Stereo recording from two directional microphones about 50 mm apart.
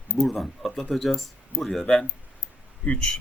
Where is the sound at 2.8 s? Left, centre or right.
Left.